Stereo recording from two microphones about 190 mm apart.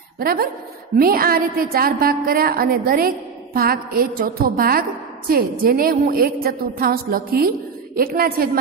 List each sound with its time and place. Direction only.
0.2 s a woman's voice: 55° right (ahead or behind)